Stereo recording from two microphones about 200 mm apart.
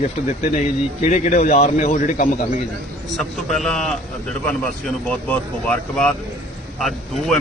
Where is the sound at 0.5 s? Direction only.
35° left (ahead or behind).